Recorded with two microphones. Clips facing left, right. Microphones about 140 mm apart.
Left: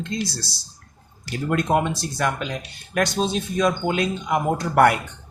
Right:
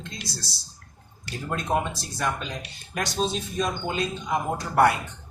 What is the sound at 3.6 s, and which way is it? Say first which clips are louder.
Speech: left 6 dB; 70° left (ahead or behind).